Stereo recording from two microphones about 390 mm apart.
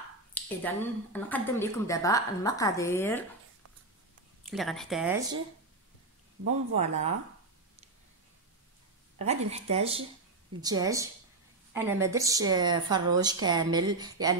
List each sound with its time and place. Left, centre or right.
0.3 s speech: centre
4.4 s speech: centre
6.4 s a woman's voice: centre
9.2 s a woman's voice: centre